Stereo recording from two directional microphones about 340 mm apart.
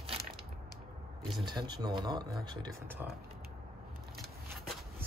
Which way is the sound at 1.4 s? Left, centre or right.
Centre.